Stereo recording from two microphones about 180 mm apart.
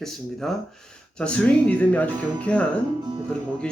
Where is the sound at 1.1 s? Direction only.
5° left (ahead or behind).